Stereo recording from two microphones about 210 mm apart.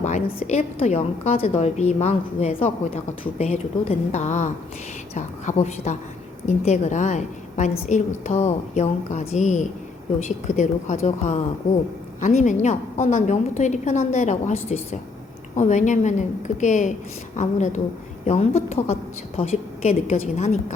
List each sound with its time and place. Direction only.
0.0 s a woman's voice: 35° left (ahead or behind)